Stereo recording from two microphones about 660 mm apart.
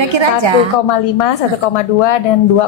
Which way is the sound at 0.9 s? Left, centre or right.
Left.